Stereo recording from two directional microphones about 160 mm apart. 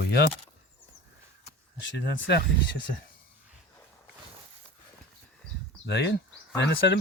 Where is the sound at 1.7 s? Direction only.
90° left.